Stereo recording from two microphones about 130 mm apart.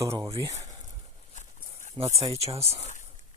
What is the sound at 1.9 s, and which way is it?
Speech, 50° right (ahead or behind).